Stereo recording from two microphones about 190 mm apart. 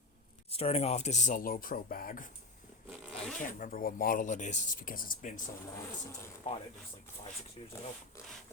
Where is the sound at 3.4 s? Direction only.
45° left (ahead or behind).